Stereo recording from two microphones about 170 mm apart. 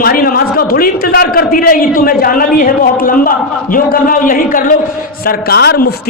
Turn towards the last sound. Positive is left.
turn(degrees=65)  # may be behind; listen again after turning